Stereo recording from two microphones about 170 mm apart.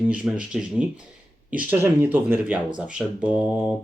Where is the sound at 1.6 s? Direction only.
15° right (ahead or behind).